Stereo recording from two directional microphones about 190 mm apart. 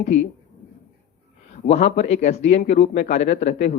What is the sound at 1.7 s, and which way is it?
Speech, 35° left (ahead or behind).